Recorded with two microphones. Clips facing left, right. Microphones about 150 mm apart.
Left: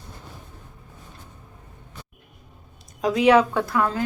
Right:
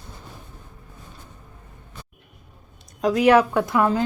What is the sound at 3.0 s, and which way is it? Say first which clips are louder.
Speech: right 1 dB; 5° right (ahead or behind).